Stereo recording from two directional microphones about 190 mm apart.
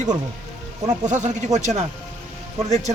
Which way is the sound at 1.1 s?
40° right (ahead or behind).